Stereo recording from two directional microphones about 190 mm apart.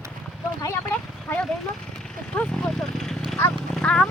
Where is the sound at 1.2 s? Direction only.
5° left (ahead or behind).